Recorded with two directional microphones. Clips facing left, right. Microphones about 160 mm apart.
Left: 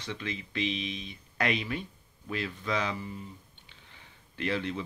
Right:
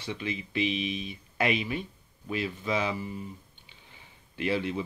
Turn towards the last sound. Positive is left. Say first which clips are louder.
# right 3 dB
turn(degrees=-10)  # may be behind; listen again after turning